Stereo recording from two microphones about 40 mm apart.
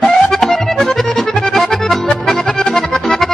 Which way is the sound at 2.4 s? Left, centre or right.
Centre.